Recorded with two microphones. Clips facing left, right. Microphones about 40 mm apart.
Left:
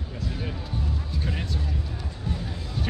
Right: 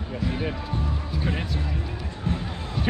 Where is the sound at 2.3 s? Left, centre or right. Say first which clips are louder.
Right 5 dB; right.